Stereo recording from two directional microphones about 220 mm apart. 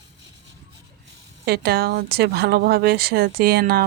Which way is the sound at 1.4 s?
45° right (ahead or behind).